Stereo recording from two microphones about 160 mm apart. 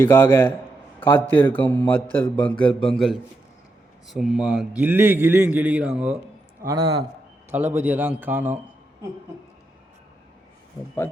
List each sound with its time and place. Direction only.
0.0 s a man's voice: 10° left (ahead or behind); by 6.1 s 5° right (ahead or behind)
6.7 s a man's voice: 25° right (ahead or behind)
7.5 s a man's voice: 10° right (ahead or behind)